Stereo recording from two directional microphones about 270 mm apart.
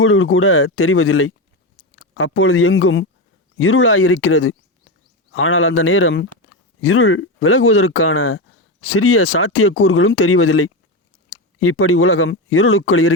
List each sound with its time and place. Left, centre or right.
0.0 s speech: left